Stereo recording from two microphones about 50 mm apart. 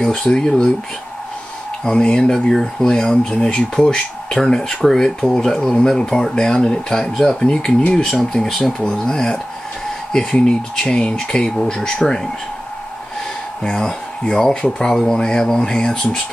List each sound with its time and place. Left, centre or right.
0.0 s speech: centre
1.9 s speech: centre
13.6 s speech: centre